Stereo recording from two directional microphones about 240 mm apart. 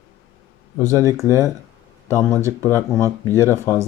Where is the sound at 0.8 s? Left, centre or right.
Centre.